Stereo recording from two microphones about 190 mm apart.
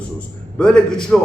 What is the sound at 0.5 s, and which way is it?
Speech, 5° left (ahead or behind).